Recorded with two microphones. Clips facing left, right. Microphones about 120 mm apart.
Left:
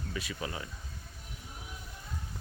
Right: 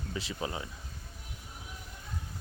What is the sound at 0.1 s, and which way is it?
Speech, 25° right (ahead or behind).